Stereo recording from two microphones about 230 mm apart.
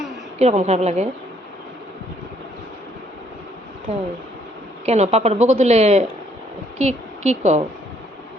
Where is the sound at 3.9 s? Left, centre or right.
Right.